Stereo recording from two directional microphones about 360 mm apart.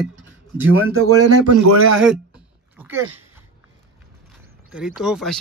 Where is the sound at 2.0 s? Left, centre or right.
Centre.